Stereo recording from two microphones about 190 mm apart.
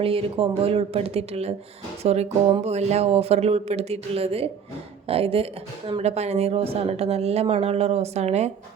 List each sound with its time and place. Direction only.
0.0 s a woman's voice: 30° right (ahead or behind)